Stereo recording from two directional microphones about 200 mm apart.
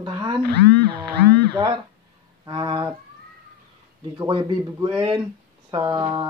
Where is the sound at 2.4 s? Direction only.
25° right (ahead or behind).